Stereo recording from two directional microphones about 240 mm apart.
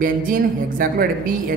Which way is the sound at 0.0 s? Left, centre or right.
Right.